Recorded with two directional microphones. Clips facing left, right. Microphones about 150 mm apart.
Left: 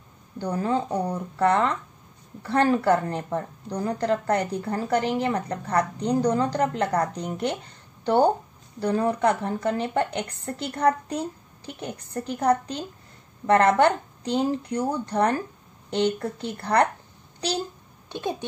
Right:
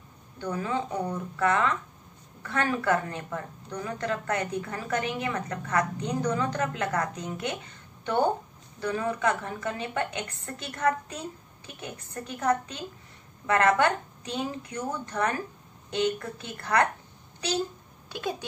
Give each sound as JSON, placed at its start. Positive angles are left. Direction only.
{"t": 0.4, "sound": "a woman's voice", "side_deg": 35}